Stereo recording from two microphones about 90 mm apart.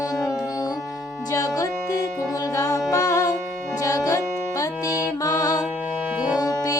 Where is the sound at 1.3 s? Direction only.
40° left (ahead or behind).